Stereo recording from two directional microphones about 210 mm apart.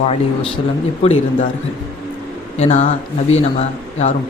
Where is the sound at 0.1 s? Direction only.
25° left (ahead or behind).